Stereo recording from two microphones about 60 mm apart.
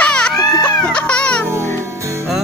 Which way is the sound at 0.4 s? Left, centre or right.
Left.